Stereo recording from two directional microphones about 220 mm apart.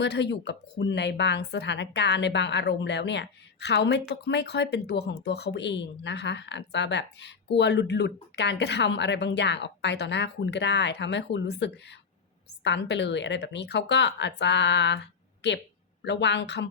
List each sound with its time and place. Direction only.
0.0 s speech: 50° left (ahead or behind)